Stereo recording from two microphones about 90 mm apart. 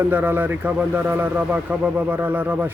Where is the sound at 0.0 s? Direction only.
20° right (ahead or behind).